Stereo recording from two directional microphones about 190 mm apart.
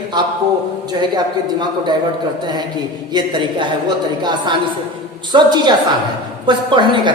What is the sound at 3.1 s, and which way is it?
A woman's voice, 25° right (ahead or behind).